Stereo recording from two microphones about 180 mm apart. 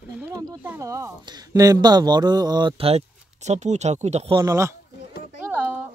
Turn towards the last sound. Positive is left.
turn(degrees=-10)  # may be behind; listen again after turning